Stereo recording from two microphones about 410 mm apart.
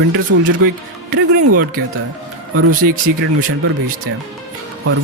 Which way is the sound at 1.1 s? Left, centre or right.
Right.